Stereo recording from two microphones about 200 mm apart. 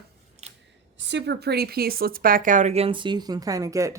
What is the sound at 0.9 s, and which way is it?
Speech, 60° right (ahead or behind).